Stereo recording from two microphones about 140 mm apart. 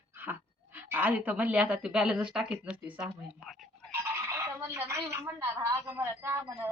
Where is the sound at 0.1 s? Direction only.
15° right (ahead or behind).